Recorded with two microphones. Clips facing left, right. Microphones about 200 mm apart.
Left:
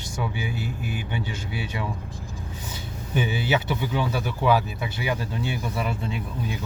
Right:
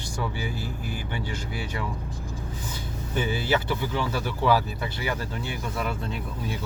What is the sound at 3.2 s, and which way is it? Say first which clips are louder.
Speech: left 1 dB; 20° left (ahead or behind).